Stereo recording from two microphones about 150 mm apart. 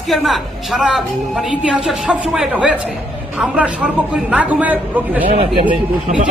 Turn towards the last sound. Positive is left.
turn(degrees=-35)  # may be behind; listen again after turning